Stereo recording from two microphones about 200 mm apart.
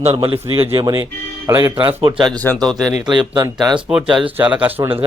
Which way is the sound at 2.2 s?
10° left (ahead or behind).